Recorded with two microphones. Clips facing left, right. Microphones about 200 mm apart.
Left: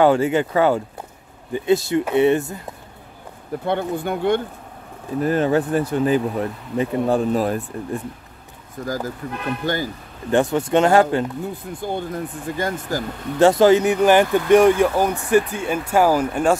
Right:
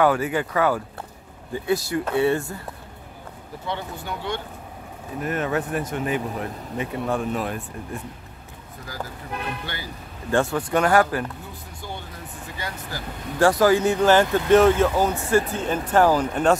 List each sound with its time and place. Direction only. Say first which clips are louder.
0.0 s speech: left 5 dB; 25° left (ahead or behind)
3.6 s speech: left 9 dB; 55° left (ahead or behind)
5.2 s speech: left 7 dB; 30° left (ahead or behind)
8.8 s speech: left 9 dB; 45° left (ahead or behind)
10.3 s speech: left 4 dB; 20° left (ahead or behind)
11.8 s speech: left 11 dB; 50° left (ahead or behind)
13.4 s speech: left 4 dB; 25° left (ahead or behind)